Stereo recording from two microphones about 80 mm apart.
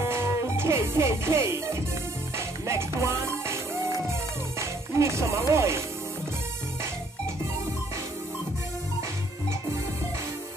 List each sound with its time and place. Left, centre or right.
0.0 s music: right
5.5 s speech: right